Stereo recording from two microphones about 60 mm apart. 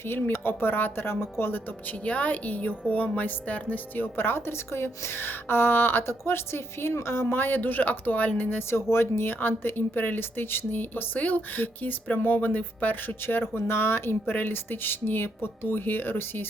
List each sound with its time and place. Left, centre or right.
0.0 s a woman's voice: left
2.0 s a woman's voice: left